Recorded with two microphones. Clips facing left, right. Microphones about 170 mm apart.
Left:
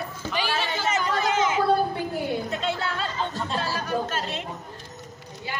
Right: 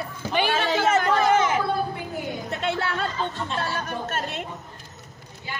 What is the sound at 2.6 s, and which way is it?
Chatter, 65° right (ahead or behind).